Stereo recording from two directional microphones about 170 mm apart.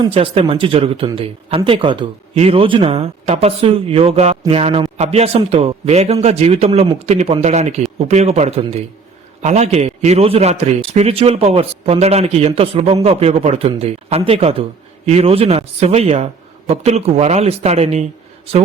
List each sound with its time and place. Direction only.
0.0 s a man's voice: 35° right (ahead or behind)